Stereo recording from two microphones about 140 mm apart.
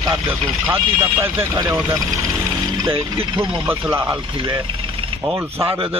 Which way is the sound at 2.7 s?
20° right (ahead or behind).